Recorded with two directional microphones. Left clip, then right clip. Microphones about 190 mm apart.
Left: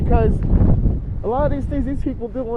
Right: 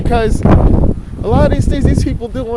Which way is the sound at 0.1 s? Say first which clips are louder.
Right 5 dB; 50° right (ahead or behind).